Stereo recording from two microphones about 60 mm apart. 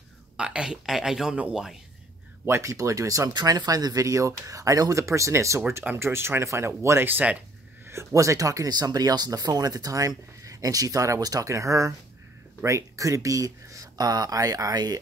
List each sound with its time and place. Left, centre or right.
0.4 s speech: centre
2.4 s speech: right
5.0 s speech: right
5.9 s speech: right
7.1 s speech: right
7.8 s speech: right